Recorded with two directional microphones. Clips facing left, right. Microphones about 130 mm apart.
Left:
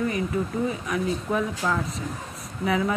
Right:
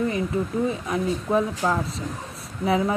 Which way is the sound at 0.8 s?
30° right (ahead or behind).